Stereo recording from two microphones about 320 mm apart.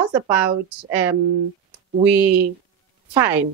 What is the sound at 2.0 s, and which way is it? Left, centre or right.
Speech, centre.